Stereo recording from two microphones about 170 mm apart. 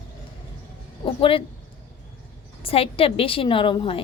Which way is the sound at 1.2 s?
30° left (ahead or behind).